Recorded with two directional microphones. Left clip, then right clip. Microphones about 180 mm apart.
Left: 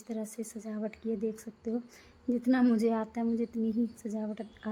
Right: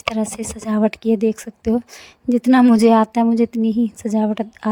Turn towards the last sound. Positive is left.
turn(degrees=-60)  # may be behind; listen again after turning